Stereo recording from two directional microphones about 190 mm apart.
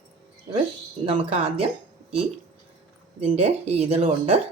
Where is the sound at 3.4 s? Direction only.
35° right (ahead or behind).